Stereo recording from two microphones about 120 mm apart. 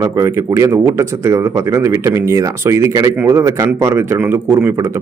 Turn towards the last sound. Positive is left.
turn(degrees=-15)  # may be behind; listen again after turning